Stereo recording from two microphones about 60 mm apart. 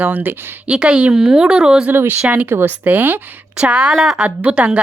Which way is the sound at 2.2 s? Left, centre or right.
Right.